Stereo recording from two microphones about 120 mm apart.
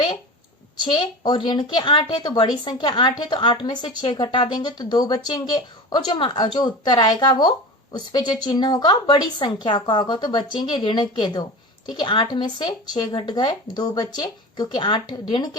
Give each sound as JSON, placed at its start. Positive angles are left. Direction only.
{"t": 0.9, "sound": "a woman's voice", "side_deg": 40}